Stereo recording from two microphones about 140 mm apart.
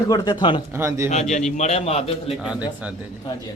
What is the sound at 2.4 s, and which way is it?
Speech, 5° right (ahead or behind).